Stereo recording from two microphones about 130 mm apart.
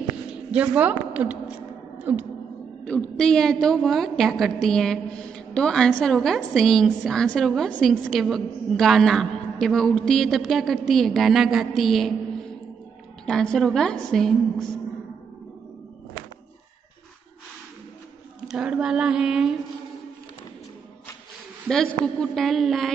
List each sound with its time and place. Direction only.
0.6 s speech: 10° right (ahead or behind)
2.8 s a woman's voice: 10° left (ahead or behind)
13.2 s a woman's voice: 5° left (ahead or behind)
18.5 s a woman's voice: 5° right (ahead or behind)
22.0 s a woman's voice: 5° left (ahead or behind)